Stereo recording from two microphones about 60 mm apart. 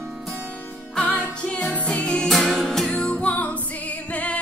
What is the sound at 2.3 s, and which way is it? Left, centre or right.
Music, centre.